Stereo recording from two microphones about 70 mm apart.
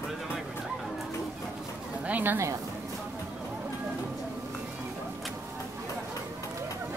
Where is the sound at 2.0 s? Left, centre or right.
Right.